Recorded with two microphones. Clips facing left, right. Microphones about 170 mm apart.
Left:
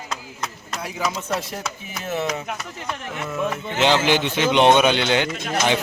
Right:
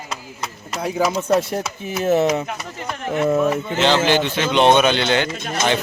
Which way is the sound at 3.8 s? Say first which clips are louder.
Right 1 dB; 15° left (ahead or behind).